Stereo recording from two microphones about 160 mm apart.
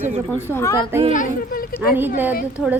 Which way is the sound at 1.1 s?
55° left (ahead or behind).